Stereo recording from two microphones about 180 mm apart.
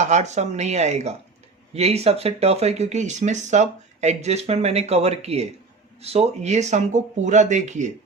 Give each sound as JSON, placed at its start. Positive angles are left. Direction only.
{"t": 0.0, "sound": "speech", "side_deg": -40}